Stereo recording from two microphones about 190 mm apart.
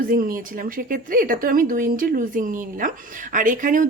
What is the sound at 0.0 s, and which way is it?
Speech, 50° right (ahead or behind).